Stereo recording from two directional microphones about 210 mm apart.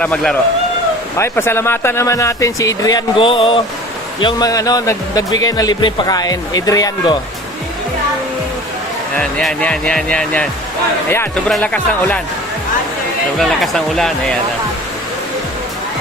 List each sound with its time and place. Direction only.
0.0 s speech: 5° left (ahead or behind)
9.1 s speech: 5° left (ahead or behind)
13.4 s speech: centre (ahead or behind)